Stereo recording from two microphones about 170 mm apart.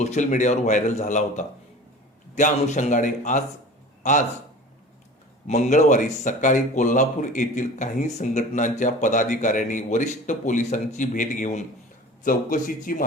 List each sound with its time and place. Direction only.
0.0 s a man's voice: 45° left (ahead or behind)
5.5 s a man's voice: 40° left (ahead or behind)